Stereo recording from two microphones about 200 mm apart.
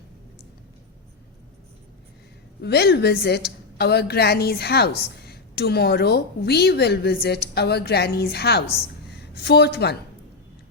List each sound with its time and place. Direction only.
2.6 s a woman's voice: 55° left (ahead or behind)